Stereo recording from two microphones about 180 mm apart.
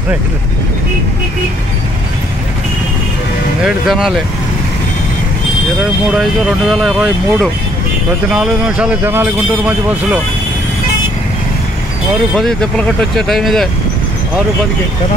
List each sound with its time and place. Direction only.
3.6 s speech: centre (ahead or behind)
6.7 s a man's voice: centre (ahead or behind)
12.4 s speech: 5° left (ahead or behind)